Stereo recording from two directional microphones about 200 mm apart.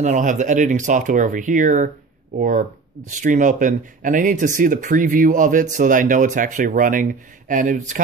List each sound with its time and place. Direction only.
0.0 s speech: 40° right (ahead or behind)